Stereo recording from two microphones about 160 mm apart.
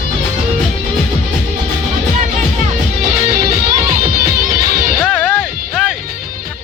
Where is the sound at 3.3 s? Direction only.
65° right (ahead or behind).